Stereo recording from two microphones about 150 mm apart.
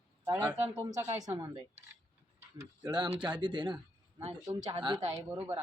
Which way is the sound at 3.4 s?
30° right (ahead or behind).